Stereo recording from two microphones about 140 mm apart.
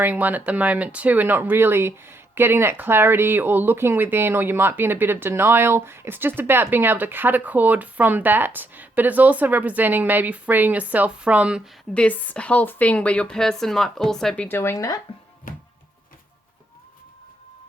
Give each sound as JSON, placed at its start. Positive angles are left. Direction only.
{"t": 0.0, "sound": "speech", "side_deg": -10}
{"t": 11.9, "sound": "speech", "side_deg": 10}
{"t": 14.4, "sound": "speech", "side_deg": 15}
{"t": 15.5, "sound": "music", "side_deg": 80}